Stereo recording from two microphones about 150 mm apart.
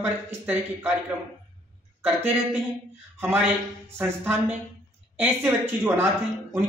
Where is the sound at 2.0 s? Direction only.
15° right (ahead or behind).